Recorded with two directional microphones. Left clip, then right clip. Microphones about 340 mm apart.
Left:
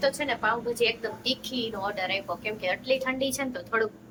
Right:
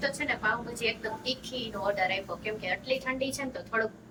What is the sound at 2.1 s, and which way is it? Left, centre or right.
A woman's voice, centre.